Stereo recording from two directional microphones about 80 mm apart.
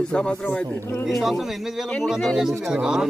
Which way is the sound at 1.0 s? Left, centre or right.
Centre.